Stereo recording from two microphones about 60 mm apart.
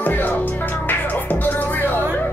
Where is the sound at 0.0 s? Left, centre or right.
Left.